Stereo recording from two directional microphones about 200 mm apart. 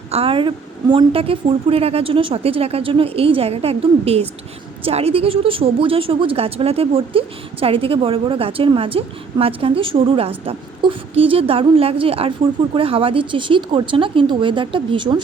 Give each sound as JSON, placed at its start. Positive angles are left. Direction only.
{"t": 0.1, "sound": "a woman's voice", "side_deg": -30}